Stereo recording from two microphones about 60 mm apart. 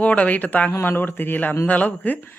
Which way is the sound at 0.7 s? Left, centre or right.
Left.